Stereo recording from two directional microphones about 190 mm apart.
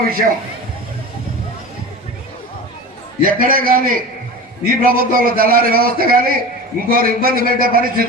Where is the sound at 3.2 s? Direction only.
50° right (ahead or behind).